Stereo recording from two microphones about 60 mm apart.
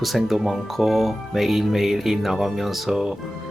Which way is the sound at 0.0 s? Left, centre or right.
Centre.